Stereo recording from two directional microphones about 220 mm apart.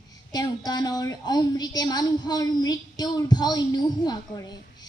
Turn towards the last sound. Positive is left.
turn(degrees=20)  # may be behind; listen again after turning